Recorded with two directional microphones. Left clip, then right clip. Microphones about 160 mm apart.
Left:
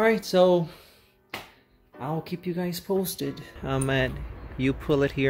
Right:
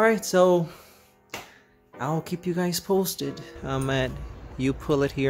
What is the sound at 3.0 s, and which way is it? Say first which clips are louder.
Speech: right 2 dB; 5° right (ahead or behind).